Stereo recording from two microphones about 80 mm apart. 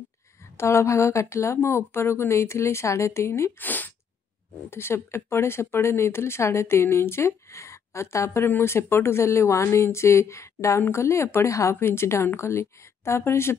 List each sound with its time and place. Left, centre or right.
0.6 s speech: left
3.5 s speech: left